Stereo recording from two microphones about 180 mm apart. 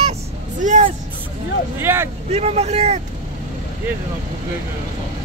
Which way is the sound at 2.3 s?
35° right (ahead or behind).